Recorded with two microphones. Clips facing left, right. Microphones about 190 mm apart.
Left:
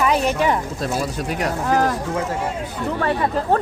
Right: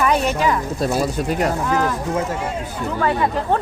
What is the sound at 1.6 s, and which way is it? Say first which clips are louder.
Speech: left 1 dB; 40° left (ahead or behind).